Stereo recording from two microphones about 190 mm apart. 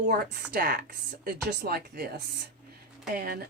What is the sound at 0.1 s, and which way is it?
Speech, 55° right (ahead or behind).